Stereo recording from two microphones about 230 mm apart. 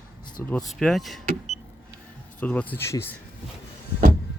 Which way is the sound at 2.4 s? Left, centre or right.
Centre.